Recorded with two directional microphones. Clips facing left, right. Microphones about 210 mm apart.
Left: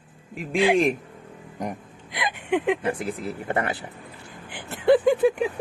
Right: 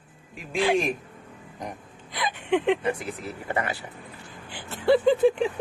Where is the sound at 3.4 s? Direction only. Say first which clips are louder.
Left 2 dB; 55° left (ahead or behind).